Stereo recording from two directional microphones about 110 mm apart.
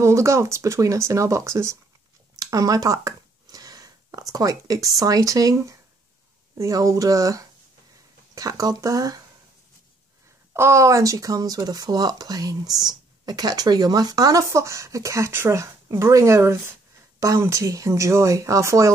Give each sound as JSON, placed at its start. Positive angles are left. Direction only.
{"t": 0.0, "sound": "speech", "side_deg": -25}
{"t": 10.5, "sound": "speech", "side_deg": -25}